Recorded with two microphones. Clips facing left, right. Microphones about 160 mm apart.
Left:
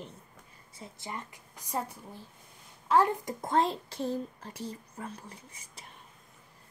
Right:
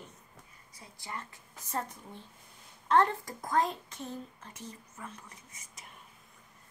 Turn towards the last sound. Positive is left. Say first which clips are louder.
# left 3 dB
turn(degrees=30)  # may be behind; listen again after turning